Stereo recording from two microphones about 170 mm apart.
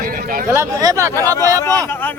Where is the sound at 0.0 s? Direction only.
55° right (ahead or behind).